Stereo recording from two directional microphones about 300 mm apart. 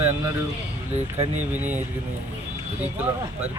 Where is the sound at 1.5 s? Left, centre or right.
Centre.